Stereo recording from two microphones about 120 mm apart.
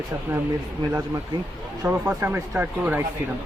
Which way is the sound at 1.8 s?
25° right (ahead or behind).